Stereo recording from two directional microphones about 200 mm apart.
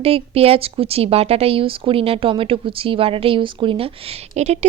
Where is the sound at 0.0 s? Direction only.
30° right (ahead or behind).